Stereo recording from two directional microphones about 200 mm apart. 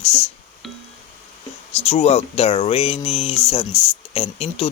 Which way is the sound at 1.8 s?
30° left (ahead or behind).